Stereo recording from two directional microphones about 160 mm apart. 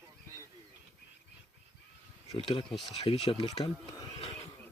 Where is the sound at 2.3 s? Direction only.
35° left (ahead or behind).